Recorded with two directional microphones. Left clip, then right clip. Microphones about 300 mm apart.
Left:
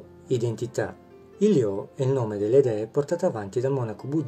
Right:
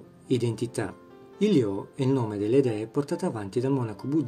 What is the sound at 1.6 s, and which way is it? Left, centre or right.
A man's voice, right.